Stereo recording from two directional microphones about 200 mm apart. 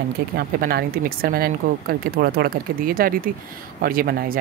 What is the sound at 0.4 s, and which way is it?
Speech, 50° right (ahead or behind).